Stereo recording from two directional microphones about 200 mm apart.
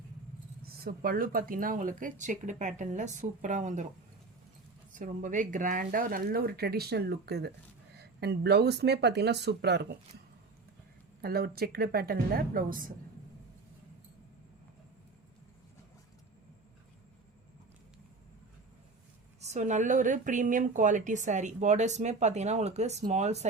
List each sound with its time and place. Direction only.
0.6 s speech: 45° right (ahead or behind)
4.9 s speech: 40° right (ahead or behind); by 10.0 s 55° right (ahead or behind)
11.2 s speech: 50° right (ahead or behind)
19.4 s speech: 35° right (ahead or behind)